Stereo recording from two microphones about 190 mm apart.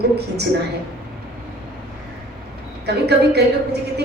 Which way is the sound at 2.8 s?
60° right (ahead or behind).